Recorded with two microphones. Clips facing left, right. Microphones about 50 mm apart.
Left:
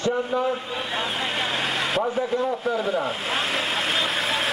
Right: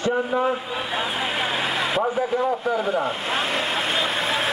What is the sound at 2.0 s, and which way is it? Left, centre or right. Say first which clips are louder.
A man's voice: right 2 dB; centre.